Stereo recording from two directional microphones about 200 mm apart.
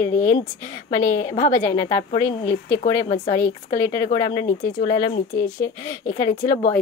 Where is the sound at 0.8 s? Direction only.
20° left (ahead or behind).